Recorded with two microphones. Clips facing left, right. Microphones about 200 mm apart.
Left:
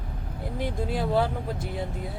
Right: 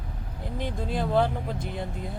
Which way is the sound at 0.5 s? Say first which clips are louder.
Left 1 dB; 10° left (ahead or behind).